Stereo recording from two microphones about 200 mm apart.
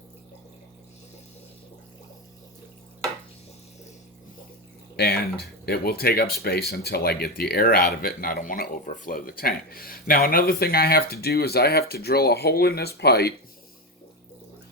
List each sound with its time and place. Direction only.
4.9 s speech: 50° left (ahead or behind)